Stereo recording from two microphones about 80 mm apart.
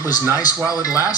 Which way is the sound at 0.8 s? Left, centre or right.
Left.